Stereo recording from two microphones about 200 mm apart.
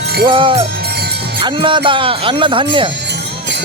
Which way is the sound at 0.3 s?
25° right (ahead or behind).